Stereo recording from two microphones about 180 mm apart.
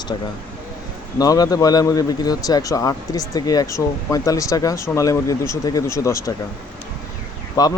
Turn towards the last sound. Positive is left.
turn(degrees=20)  # may be behind; listen again after turning